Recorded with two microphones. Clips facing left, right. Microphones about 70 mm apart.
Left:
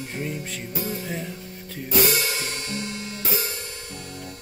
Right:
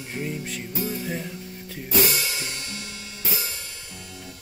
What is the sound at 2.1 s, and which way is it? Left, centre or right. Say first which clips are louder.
Music: left 3 dB; left.